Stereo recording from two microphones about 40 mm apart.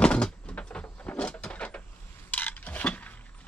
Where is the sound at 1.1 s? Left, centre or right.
Left.